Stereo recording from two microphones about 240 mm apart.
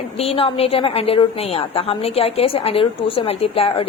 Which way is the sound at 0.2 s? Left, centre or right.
Left.